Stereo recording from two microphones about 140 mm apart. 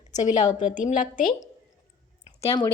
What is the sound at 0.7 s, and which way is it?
Speech, 65° left (ahead or behind).